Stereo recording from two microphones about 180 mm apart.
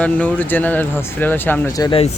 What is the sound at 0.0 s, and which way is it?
Speech, 10° left (ahead or behind).